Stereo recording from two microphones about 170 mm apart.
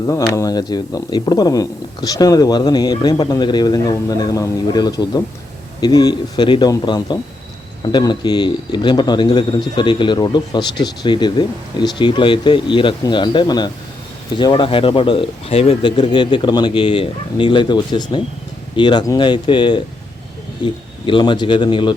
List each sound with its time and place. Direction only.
0.3 s speech: 20° left (ahead or behind)